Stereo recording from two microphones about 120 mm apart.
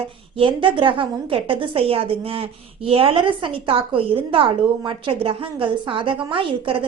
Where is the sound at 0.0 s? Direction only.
50° right (ahead or behind).